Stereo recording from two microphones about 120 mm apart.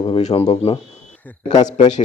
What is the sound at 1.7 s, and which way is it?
Speech, 80° left.